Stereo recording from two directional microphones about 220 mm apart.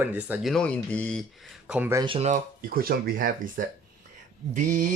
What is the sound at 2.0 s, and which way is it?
Speech, 25° right (ahead or behind).